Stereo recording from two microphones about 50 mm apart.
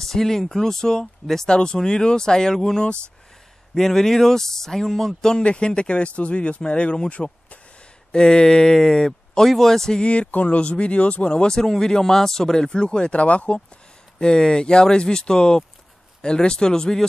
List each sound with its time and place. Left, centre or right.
0.0 s speech: centre
5.4 s speech: left
14.2 s speech: centre